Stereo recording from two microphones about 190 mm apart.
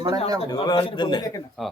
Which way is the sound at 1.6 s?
Centre (ahead or behind).